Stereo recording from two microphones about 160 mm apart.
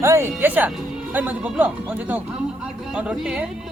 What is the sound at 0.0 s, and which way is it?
Speech, 15° right (ahead or behind).